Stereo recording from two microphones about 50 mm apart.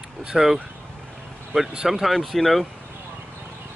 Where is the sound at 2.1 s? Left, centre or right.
Centre.